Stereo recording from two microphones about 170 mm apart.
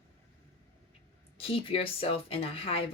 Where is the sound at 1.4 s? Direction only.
35° left (ahead or behind).